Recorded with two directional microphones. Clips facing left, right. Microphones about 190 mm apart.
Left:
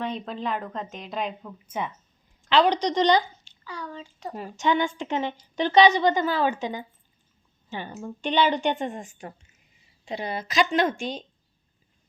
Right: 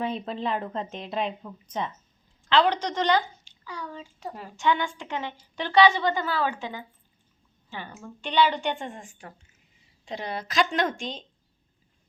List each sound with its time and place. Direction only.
0.0 s a woman's voice: 5° right (ahead or behind)
2.5 s a woman's voice: 15° left (ahead or behind)
3.4 s speech: 10° right (ahead or behind)
4.4 s a woman's voice: 20° left (ahead or behind)
10.1 s a woman's voice: 5° left (ahead or behind)